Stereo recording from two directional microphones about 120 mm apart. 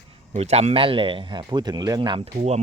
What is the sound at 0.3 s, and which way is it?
Speech, 65° right (ahead or behind).